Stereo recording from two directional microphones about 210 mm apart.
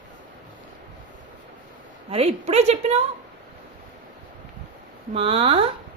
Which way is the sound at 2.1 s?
30° right (ahead or behind).